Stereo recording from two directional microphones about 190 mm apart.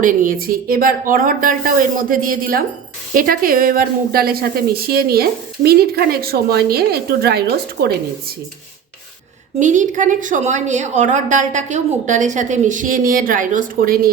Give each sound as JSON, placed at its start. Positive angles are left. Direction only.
{"t": 0.0, "sound": "a woman's voice", "side_deg": -45}
{"t": 9.6, "sound": "a woman's voice", "side_deg": -40}